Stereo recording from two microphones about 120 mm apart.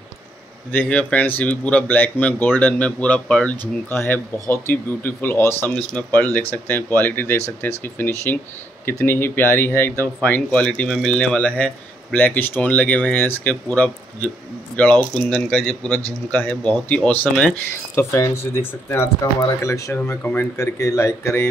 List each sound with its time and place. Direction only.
0.7 s speech: 10° left (ahead or behind)
17.9 s speech: 25° left (ahead or behind)